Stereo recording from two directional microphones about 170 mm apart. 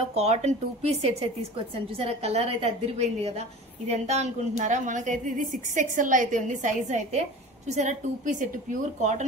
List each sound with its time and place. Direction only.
0.1 s a woman's voice: 40° right (ahead or behind)